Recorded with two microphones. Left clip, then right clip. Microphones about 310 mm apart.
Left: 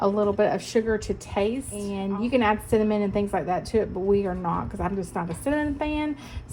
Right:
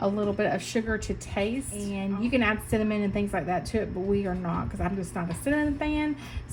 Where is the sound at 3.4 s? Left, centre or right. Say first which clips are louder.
Left 1 dB; left.